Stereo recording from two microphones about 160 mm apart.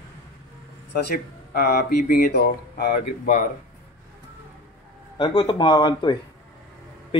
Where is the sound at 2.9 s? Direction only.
55° left (ahead or behind).